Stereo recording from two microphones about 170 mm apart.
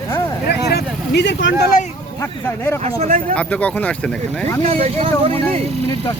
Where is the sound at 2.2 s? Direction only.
15° left (ahead or behind).